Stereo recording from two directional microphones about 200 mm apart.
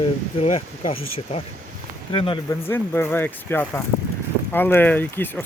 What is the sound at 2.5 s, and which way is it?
Speech, 10° left (ahead or behind).